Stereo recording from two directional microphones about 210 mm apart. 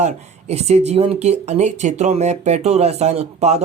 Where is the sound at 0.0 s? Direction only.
30° right (ahead or behind).